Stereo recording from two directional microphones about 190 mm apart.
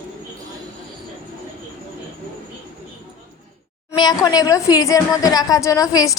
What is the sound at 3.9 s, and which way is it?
A woman's voice, 20° left (ahead or behind).